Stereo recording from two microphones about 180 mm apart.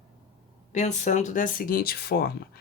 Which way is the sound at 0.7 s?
40° left (ahead or behind).